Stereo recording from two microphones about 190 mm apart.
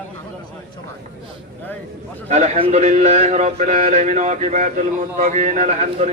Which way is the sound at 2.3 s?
35° right (ahead or behind).